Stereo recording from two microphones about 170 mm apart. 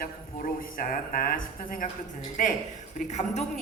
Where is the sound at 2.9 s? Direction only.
45° left (ahead or behind).